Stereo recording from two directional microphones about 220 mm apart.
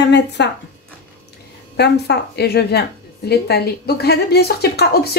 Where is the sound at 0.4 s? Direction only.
50° left (ahead or behind).